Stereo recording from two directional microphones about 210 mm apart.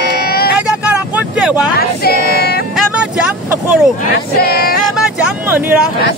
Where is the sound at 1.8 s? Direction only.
50° left (ahead or behind).